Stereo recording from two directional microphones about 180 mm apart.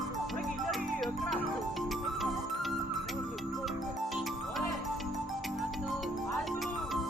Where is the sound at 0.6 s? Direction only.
Centre (ahead or behind).